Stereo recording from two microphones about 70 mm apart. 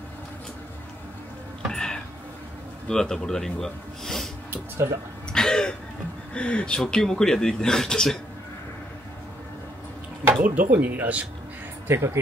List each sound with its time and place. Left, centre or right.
1.7 s a sound: centre
2.9 s speech: centre
4.5 s music: right
5.3 s throat clearing: centre
6.3 s speech: centre
10.4 s speech: right
11.9 s speech: right